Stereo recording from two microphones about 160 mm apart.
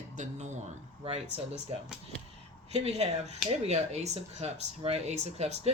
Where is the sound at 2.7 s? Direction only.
40° right (ahead or behind).